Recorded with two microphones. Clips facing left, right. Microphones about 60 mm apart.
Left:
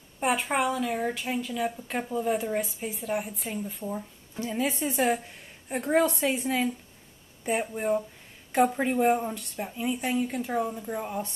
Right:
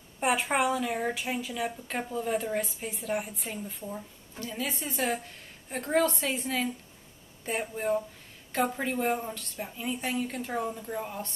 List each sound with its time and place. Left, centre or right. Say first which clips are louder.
0.2 s speech: even; centre
3.8 s speech: left 5 dB; centre
4.8 s speech: left 4 dB; centre